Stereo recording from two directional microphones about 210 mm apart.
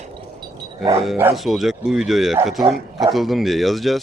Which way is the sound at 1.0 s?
5° right (ahead or behind).